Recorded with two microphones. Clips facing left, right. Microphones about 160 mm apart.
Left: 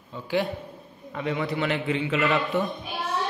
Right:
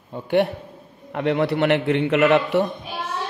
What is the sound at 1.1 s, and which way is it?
A man's voice, 70° right (ahead or behind).